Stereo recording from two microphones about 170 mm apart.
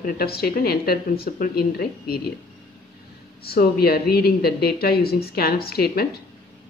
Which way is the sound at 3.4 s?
65° left (ahead or behind).